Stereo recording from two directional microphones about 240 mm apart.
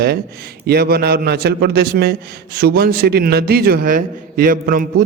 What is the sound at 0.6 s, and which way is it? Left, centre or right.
A man's voice, right.